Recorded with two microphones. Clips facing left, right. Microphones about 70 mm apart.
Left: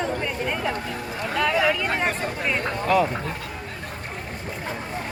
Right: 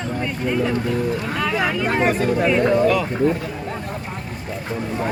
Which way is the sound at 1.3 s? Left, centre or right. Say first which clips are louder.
Left 4 dB; centre.